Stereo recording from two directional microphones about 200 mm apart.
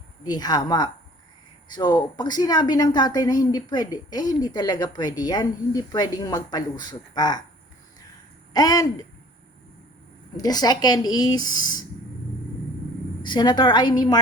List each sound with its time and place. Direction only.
0.3 s speech: 20° left (ahead or behind)
8.5 s speech: 20° left (ahead or behind)
10.3 s speech: 20° left (ahead or behind)
13.2 s speech: 20° left (ahead or behind)